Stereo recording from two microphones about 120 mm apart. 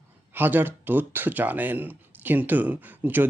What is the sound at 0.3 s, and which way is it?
Speech, 15° right (ahead or behind).